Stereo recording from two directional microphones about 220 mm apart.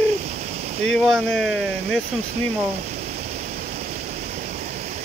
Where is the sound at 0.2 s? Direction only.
30° right (ahead or behind).